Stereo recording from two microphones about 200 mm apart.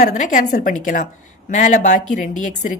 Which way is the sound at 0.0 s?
40° left (ahead or behind).